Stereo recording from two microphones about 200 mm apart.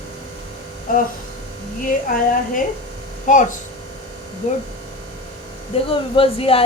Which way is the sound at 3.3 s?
35° left (ahead or behind).